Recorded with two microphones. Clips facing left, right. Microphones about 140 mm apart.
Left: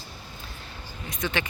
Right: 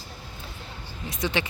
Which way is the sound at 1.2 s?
25° right (ahead or behind).